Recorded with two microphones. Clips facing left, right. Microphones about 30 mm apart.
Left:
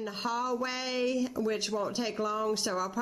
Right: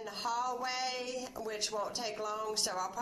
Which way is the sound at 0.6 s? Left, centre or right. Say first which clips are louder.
Left 5 dB; centre.